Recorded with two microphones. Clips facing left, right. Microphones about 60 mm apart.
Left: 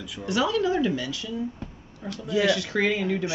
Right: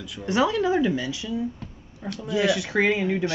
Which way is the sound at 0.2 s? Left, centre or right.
Right.